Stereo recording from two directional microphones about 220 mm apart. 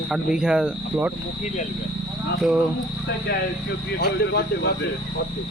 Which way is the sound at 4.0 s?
45° left (ahead or behind).